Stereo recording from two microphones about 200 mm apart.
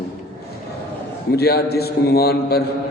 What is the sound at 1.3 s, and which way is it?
A man's voice, 50° left (ahead or behind).